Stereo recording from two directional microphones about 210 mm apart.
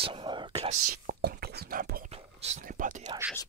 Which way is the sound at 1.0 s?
45° right (ahead or behind).